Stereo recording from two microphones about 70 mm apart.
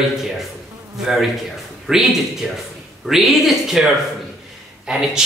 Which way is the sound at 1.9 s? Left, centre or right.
Centre.